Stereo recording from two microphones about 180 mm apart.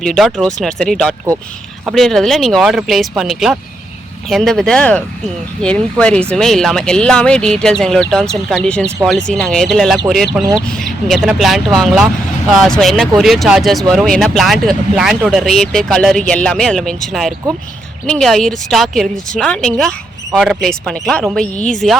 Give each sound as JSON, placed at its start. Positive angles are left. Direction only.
{"t": 0.0, "sound": "speech", "side_deg": 5}